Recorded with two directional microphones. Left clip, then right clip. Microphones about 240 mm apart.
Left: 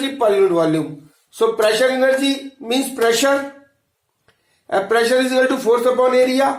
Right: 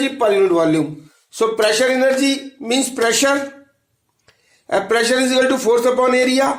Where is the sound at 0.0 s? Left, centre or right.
Right.